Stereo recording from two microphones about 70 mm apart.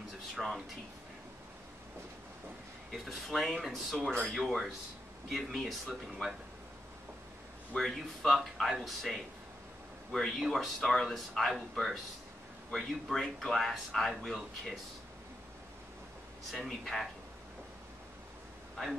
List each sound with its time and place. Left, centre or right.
0.4 s speech: centre
3.1 s speech: centre
4.4 s speech: centre
7.7 s speech: centre
16.5 s speech: centre